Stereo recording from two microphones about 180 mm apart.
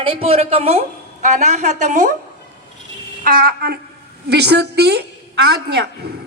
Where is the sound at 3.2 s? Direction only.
55° right (ahead or behind).